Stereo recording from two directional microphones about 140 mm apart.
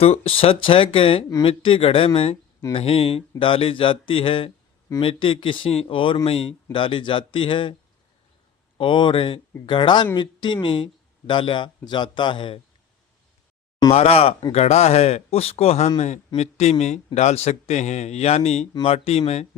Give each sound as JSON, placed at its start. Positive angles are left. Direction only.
{"t": 0.0, "sound": "speech", "side_deg": 45}
{"t": 8.8, "sound": "speech", "side_deg": 35}
{"t": 13.9, "sound": "a man's voice", "side_deg": 45}